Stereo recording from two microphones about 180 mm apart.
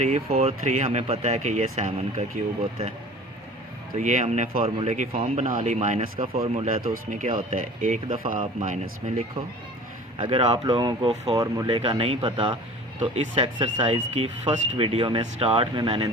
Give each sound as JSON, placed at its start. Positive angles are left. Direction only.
{"t": 0.3, "sound": "speech", "side_deg": -35}
{"t": 3.9, "sound": "speech", "side_deg": -40}
{"t": 6.0, "sound": "speech", "side_deg": -30}
{"t": 6.8, "sound": "speech", "side_deg": -45}
{"t": 11.3, "sound": "speech", "side_deg": -20}